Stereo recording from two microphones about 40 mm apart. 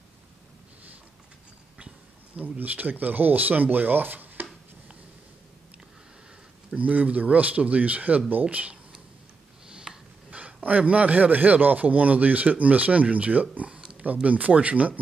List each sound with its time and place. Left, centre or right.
2.3 s speech: right
6.7 s a man's voice: right
9.9 s a sound: centre
10.3 s a man's voice: right
13.7 s a sound: right
14.2 s a man's voice: right